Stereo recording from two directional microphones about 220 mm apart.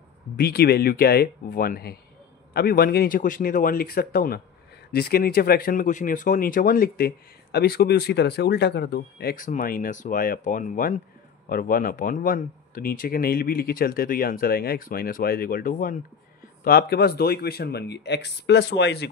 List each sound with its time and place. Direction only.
0.4 s speech: 45° left (ahead or behind)